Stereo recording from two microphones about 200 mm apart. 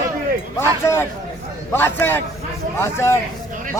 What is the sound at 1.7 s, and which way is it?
A man's voice, 10° left (ahead or behind).